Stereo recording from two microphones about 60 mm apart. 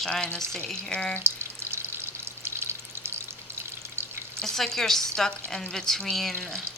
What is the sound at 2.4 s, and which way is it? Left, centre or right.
Frying, right.